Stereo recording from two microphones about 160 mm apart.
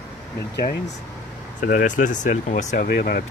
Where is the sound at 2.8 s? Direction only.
75° left (ahead or behind).